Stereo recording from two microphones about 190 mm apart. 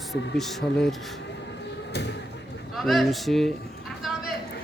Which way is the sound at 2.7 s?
Centre (ahead or behind).